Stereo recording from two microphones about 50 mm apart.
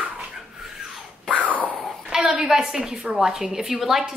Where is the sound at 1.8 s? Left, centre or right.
Centre.